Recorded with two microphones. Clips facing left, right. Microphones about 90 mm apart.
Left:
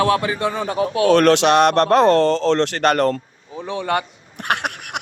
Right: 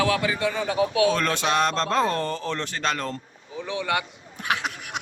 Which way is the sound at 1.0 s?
75° left (ahead or behind).